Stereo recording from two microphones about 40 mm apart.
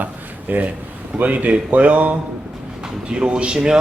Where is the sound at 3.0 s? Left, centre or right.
Right.